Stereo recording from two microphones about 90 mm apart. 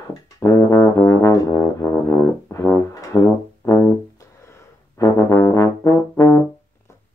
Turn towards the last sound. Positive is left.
turn(degrees=35)  # may be behind; listen again after turning